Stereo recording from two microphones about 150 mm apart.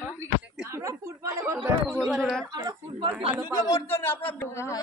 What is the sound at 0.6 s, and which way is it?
Speech, 20° right (ahead or behind).